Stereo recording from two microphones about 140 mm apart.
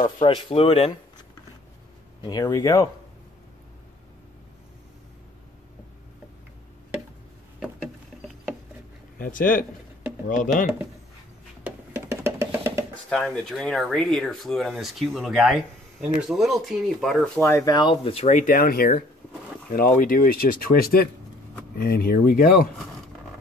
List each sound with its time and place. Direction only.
0.0 s speech: 35° left (ahead or behind)
2.2 s speech: 30° left (ahead or behind)
9.2 s speech: 75° left (ahead or behind)
11.6 s music: 15° right (ahead or behind)
13.1 s speech: 5° left (ahead or behind)
17.4 s speech: 20° left (ahead or behind); by 18.2 s 35° left (ahead or behind)
18.2 s speech: 75° left (ahead or behind)